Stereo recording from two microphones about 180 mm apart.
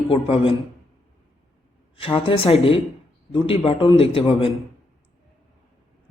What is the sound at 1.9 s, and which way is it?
Speech, 30° left (ahead or behind).